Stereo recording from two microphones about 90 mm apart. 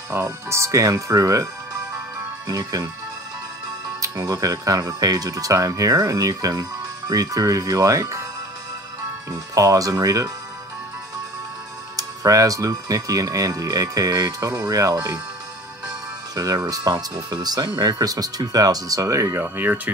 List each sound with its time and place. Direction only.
0.1 s speech: 30° right (ahead or behind)
4.0 s speech: 40° right (ahead or behind)
9.3 s speech: 40° right (ahead or behind)
12.0 s speech: 40° right (ahead or behind)
16.3 s speech: 40° right (ahead or behind)
19.4 s speech: 20° right (ahead or behind)